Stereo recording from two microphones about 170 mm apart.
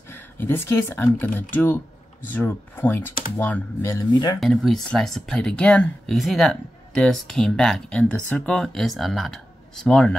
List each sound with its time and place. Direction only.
0.1 s speech: 10° left (ahead or behind)
4.4 s speech: centre (ahead or behind)